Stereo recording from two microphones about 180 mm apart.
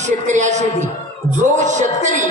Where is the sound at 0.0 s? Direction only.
40° right (ahead or behind).